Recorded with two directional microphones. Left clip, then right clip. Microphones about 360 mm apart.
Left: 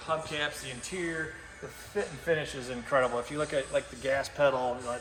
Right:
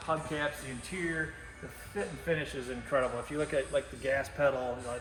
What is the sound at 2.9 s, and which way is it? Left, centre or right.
Speech, left.